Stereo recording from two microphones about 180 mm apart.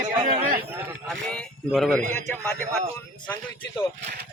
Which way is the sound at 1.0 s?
5° left (ahead or behind).